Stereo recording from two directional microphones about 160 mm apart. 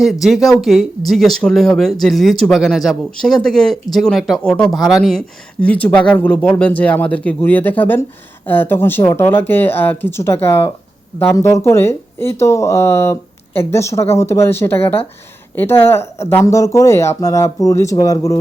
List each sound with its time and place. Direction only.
0.0 s speech: centre (ahead or behind); by 18.3 s 20° left (ahead or behind)